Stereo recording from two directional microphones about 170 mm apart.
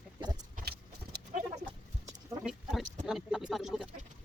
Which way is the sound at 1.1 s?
70° right (ahead or behind).